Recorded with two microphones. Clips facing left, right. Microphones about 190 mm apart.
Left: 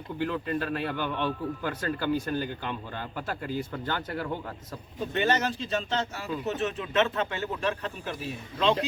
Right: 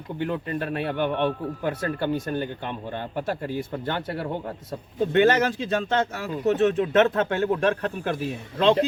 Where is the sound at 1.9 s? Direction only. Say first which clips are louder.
Right 2 dB; 25° right (ahead or behind).